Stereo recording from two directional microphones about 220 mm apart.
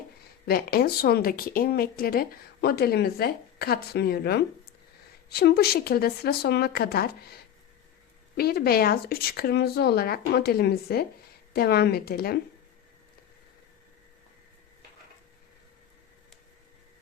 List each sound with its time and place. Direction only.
0.4 s speech: 45° left (ahead or behind)
8.4 s speech: 45° left (ahead or behind)